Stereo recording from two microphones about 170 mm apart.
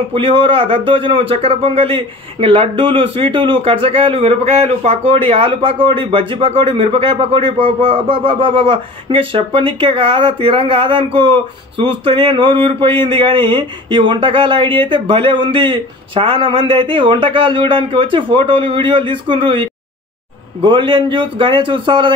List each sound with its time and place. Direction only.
0.1 s speech: 30° right (ahead or behind)